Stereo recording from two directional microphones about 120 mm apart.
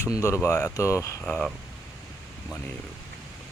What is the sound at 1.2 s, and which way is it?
Speech, 5° left (ahead or behind).